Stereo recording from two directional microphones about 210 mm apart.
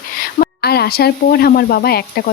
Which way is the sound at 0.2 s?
45° left (ahead or behind).